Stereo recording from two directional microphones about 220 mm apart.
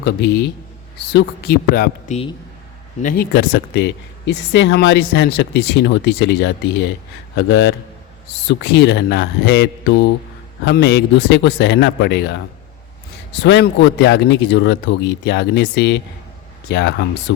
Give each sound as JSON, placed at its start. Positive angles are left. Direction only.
{"t": 0.0, "sound": "speech", "side_deg": 50}
{"t": 13.4, "sound": "speech", "side_deg": 50}